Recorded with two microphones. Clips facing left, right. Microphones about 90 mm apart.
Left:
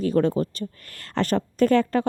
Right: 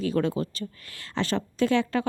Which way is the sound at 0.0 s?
40° left (ahead or behind).